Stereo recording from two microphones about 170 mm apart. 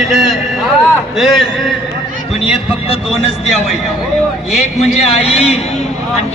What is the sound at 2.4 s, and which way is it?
Speech, 35° left (ahead or behind).